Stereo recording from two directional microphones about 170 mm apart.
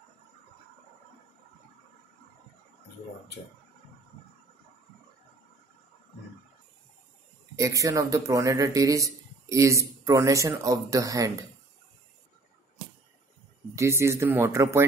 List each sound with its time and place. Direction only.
7.5 s speech: 20° right (ahead or behind)
13.7 s speech: 15° right (ahead or behind)